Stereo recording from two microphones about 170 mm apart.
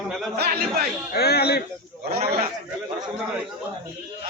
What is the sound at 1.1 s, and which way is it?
Speech, 65° left (ahead or behind).